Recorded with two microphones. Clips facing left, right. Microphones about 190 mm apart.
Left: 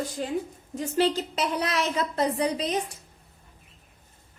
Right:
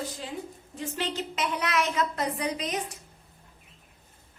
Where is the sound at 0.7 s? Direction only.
40° left (ahead or behind).